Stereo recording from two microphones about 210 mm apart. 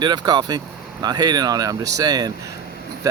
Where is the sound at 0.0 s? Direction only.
20° right (ahead or behind).